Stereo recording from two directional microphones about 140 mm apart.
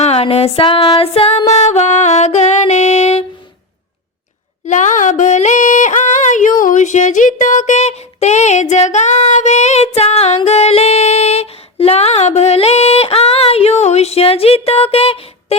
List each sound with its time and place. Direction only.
0.0 s music: 45° left (ahead or behind)
4.6 s music: 60° left (ahead or behind); by 15.5 s 45° left (ahead or behind)